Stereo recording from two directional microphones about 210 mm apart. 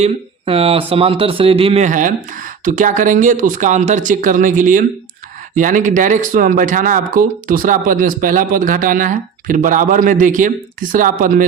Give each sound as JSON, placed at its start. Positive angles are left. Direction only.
{"t": 0.0, "sound": "speech", "side_deg": -25}